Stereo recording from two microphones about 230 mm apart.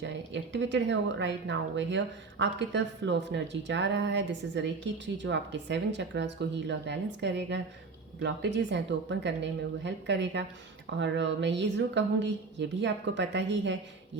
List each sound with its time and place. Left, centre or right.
0.5 s speech: right